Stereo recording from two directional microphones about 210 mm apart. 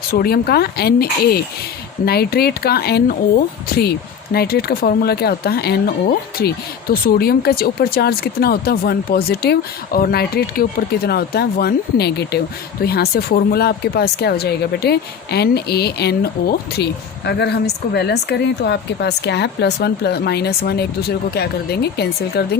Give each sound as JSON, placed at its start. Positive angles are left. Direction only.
{"t": 0.1, "sound": "speech", "side_deg": 45}